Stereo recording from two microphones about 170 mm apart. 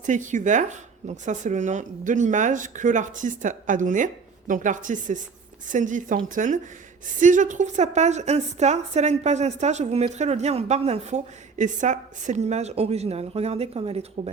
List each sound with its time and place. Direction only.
0.0 s a woman's voice: 45° right (ahead or behind)